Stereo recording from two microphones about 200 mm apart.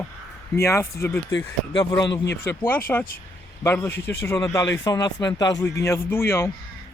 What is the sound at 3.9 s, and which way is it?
Speech, 55° left (ahead or behind).